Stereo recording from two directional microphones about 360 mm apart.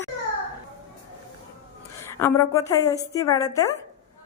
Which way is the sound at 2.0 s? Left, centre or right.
Centre.